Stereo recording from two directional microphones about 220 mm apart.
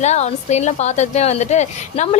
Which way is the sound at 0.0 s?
30° left (ahead or behind).